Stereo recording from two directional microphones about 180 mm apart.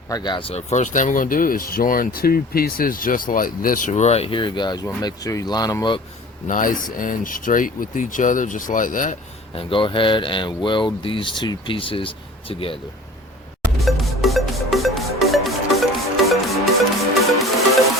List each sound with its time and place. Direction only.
0.1 s speech: 25° left (ahead or behind)
6.5 s speech: 50° left (ahead or behind)
9.6 s speech: 30° left (ahead or behind)
13.7 s music: centre (ahead or behind)